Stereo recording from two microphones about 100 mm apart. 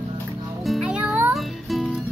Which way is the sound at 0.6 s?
5° right (ahead or behind).